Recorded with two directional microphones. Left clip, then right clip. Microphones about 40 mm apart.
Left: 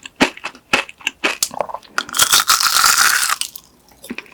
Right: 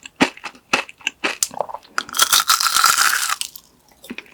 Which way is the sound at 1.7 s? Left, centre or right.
Right.